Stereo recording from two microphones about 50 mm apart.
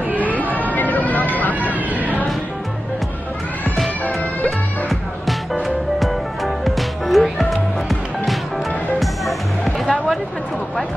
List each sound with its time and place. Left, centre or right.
0.2 s a sound: left
1.3 s vehicle: left
2.0 s music: right
4.5 s music: centre
9.7 s music: centre